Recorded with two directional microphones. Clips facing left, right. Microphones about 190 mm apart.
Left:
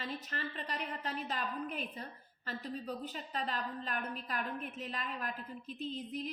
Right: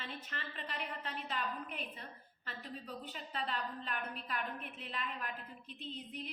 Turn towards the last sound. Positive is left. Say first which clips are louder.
# left 6 dB
turn(degrees=40)  # may be behind; listen again after turning